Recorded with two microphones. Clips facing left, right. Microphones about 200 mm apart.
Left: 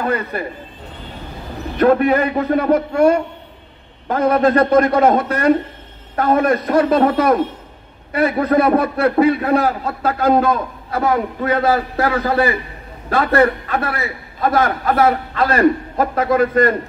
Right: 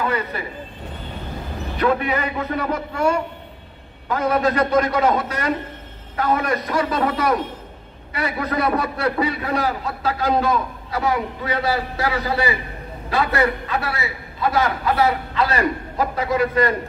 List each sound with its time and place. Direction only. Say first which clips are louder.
1.8 s a man's voice: left 7 dB; 50° left (ahead or behind)